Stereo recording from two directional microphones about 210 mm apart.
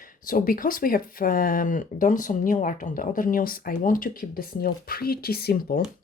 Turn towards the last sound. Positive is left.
turn(degrees=45)  # may be behind; listen again after turning